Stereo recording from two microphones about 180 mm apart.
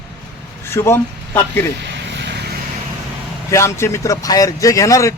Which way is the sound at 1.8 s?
70° right (ahead or behind).